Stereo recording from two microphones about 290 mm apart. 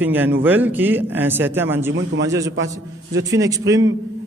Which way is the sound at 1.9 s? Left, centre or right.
Right.